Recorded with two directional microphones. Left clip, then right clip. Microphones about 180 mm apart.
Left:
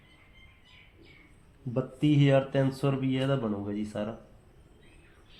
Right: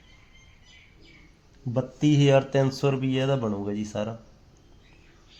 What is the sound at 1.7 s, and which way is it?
Speech, 75° right (ahead or behind).